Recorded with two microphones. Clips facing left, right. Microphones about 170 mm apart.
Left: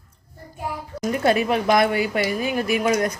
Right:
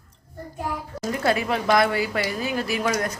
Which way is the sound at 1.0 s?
20° left (ahead or behind).